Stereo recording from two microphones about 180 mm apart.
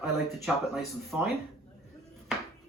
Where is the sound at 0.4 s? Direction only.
Centre (ahead or behind).